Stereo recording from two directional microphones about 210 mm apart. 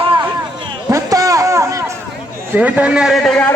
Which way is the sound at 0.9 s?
15° right (ahead or behind).